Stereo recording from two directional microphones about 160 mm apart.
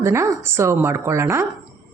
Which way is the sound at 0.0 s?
15° right (ahead or behind).